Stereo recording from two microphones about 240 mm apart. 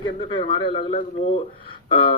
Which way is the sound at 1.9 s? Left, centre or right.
Left.